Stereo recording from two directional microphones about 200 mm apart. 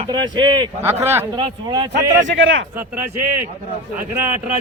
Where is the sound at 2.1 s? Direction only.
70° right (ahead or behind).